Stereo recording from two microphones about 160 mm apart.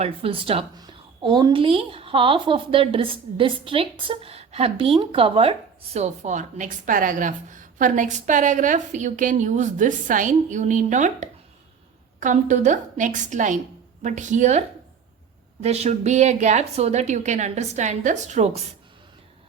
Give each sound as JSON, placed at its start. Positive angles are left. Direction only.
{"t": 0.0, "sound": "a woman's voice", "side_deg": -35}
{"t": 15.6, "sound": "a woman's voice", "side_deg": -45}